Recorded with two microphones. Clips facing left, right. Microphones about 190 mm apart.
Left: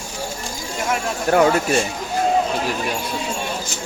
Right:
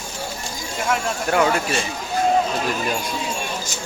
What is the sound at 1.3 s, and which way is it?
Speech, 40° left (ahead or behind).